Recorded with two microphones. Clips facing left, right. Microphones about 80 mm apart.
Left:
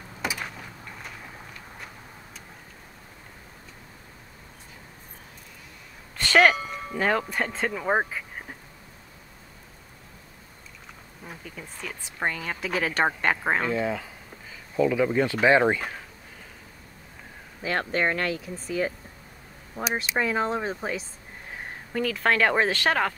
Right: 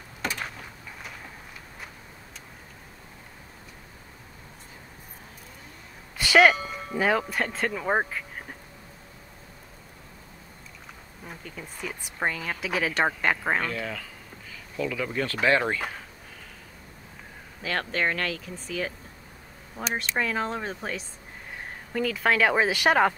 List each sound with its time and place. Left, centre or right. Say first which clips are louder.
0.2 s a sound: even; centre
6.1 s speech: right 1 dB; centre
11.2 s speech: even; centre
17.6 s speech: left 2 dB; centre
19.8 s speech: left 2 dB; centre